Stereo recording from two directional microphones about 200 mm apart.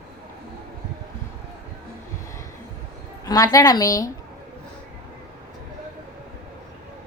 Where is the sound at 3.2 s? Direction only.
15° left (ahead or behind).